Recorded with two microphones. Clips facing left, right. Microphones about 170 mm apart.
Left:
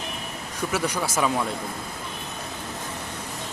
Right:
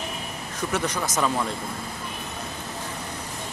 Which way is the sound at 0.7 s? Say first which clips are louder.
Left 1 dB; 10° left (ahead or behind).